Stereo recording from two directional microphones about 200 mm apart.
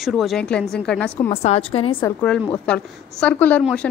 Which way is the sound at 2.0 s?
10° left (ahead or behind).